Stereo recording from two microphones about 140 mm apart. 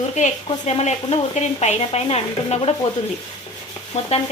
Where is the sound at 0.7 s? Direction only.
50° left (ahead or behind).